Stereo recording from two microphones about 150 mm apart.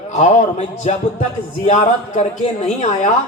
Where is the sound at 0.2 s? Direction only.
50° left (ahead or behind).